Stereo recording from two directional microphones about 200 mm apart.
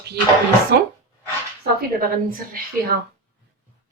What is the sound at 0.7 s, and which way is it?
Speech, 55° right (ahead or behind).